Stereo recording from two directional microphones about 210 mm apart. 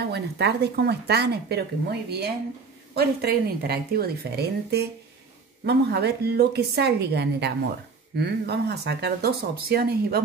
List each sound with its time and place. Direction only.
0.1 s speech: 50° right (ahead or behind)